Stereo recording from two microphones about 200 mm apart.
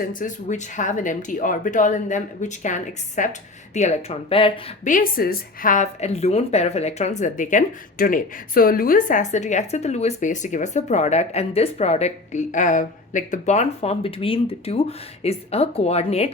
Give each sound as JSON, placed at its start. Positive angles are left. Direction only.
{"t": 0.0, "sound": "speech", "side_deg": 40}
{"t": 4.8, "sound": "speech", "side_deg": 40}